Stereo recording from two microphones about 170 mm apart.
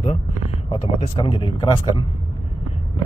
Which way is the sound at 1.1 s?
30° left (ahead or behind).